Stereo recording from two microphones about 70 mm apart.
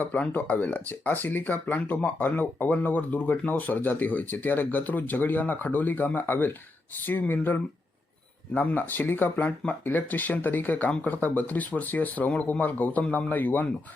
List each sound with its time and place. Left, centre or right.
0.0 s speech: left